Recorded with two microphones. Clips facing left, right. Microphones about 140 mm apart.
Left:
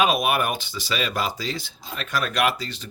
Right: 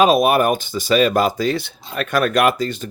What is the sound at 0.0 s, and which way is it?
Speech, 40° right (ahead or behind).